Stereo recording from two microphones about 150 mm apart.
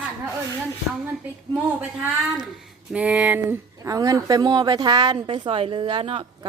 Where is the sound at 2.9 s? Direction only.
10° right (ahead or behind); by 6.3 s 40° right (ahead or behind).